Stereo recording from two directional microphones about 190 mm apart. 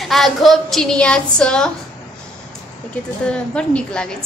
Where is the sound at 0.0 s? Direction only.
Centre (ahead or behind).